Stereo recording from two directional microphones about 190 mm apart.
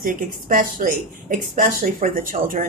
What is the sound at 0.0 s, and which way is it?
Speech, 45° right (ahead or behind).